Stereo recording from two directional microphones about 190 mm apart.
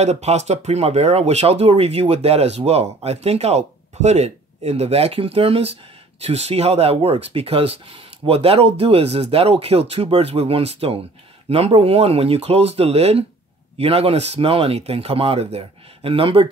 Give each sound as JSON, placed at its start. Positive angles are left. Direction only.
{"t": 0.0, "sound": "speech", "side_deg": -35}